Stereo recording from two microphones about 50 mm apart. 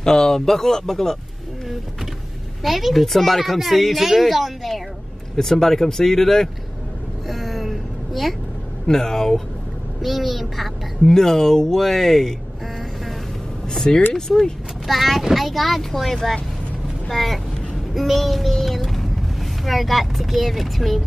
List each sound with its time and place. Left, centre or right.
0.0 s a child's voice: centre
2.6 s a child's voice: centre
7.2 s a sound: centre
8.8 s a child's voice: centre
13.7 s a child's voice: centre